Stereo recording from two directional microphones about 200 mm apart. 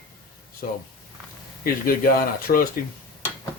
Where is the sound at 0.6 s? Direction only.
45° left (ahead or behind).